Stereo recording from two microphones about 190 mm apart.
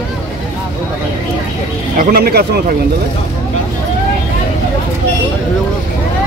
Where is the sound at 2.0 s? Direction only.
50° right (ahead or behind).